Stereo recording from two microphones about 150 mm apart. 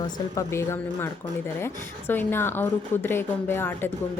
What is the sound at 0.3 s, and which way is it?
A woman's voice, 15° left (ahead or behind).